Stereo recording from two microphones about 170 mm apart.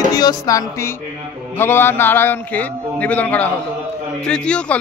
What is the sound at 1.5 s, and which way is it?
A man's voice, 10° left (ahead or behind).